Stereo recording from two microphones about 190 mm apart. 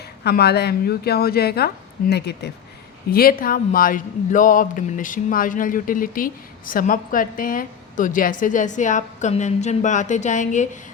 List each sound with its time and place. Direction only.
0.3 s a woman's voice: 60° left (ahead or behind); by 10.7 s 40° left (ahead or behind)